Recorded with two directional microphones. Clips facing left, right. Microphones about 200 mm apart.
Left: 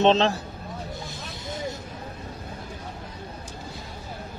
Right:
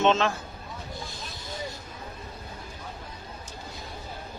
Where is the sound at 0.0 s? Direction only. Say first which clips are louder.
Left 4 dB; 35° left (ahead or behind).